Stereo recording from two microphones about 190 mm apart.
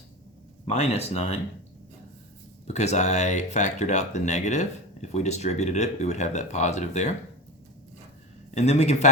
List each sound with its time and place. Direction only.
0.6 s speech: 35° left (ahead or behind)
2.6 s speech: 35° left (ahead or behind)
8.5 s speech: 35° left (ahead or behind)